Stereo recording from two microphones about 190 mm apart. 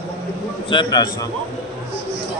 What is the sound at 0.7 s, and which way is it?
Speech, 25° left (ahead or behind).